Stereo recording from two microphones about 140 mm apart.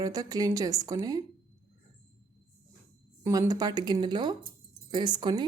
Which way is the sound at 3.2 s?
25° right (ahead or behind).